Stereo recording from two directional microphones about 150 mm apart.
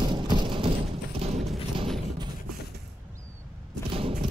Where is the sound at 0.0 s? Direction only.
30° right (ahead or behind).